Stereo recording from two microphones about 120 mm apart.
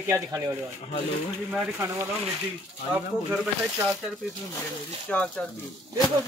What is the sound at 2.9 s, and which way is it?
Speech, 10° right (ahead or behind).